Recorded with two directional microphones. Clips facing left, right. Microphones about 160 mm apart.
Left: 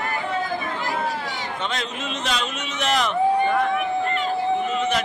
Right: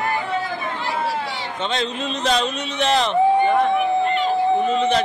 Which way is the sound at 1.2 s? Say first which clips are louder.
Right 2 dB; 30° right (ahead or behind).